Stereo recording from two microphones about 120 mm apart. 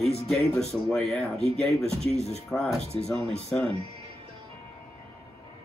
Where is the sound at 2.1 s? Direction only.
60° left (ahead or behind).